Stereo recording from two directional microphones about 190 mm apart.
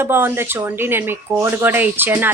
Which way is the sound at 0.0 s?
10° right (ahead or behind).